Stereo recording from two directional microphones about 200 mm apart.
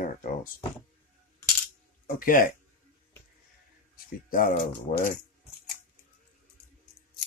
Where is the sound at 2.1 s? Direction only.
45° left (ahead or behind).